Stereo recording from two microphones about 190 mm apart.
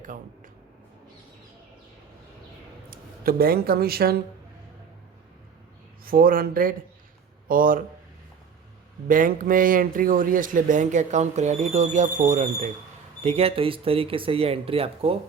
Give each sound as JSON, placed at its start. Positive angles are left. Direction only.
{"t": 2.9, "sound": "speech", "side_deg": -50}
{"t": 6.1, "sound": "speech", "side_deg": -50}
{"t": 9.0, "sound": "a man's voice", "side_deg": -45}